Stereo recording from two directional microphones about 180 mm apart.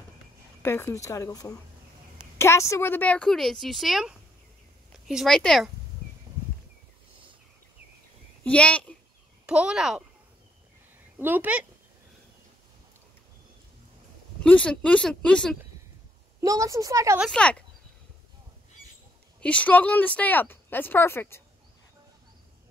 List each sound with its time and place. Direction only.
0.6 s a woman's voice: 15° left (ahead or behind)
8.5 s a child's voice: 5° left (ahead or behind)
9.5 s a woman's voice: 5° right (ahead or behind)
11.1 s speech: 10° right (ahead or behind)
14.4 s a woman's voice: 5° left (ahead or behind)
16.3 s speech: 20° right (ahead or behind)
17.2 s a woman's voice: 5° left (ahead or behind)
19.4 s speech: 5° left (ahead or behind)